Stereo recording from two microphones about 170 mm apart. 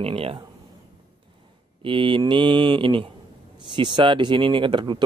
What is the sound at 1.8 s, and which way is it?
Speech, 30° right (ahead or behind).